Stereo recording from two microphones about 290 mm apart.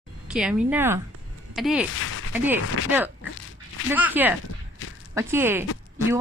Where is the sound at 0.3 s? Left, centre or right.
Centre.